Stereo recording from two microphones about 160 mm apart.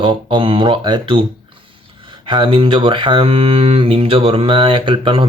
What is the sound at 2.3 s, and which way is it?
Speech, 30° right (ahead or behind).